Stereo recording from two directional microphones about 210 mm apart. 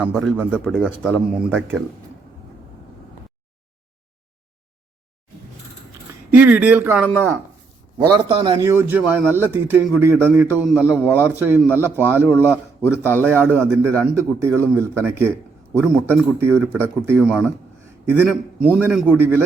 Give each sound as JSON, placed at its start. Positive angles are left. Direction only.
{"t": 0.0, "sound": "a man's voice", "side_deg": 0}
{"t": 6.3, "sound": "a man's voice", "side_deg": -5}
{"t": 8.1, "sound": "a man's voice", "side_deg": -25}
{"t": 8.6, "sound": "a man's voice", "side_deg": -10}
{"t": 13.1, "sound": "a man's voice", "side_deg": 10}
{"t": 13.6, "sound": "a man's voice", "side_deg": -10}